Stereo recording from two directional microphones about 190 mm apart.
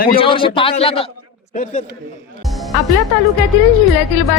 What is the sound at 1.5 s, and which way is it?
Speech, 40° left (ahead or behind).